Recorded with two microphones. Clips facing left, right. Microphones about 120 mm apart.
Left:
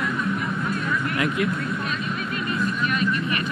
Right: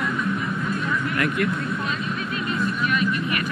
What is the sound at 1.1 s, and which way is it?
Speech, 50° right (ahead or behind).